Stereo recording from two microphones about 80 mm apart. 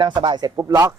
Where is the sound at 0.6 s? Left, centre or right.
Right.